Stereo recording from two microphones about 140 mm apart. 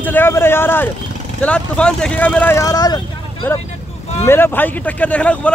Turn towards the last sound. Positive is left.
turn(degrees=10)  # may be behind; listen again after turning